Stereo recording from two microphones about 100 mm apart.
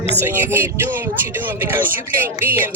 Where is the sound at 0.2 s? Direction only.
20° right (ahead or behind).